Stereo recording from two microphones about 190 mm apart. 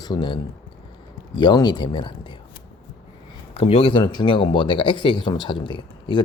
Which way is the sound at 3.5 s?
30° left (ahead or behind).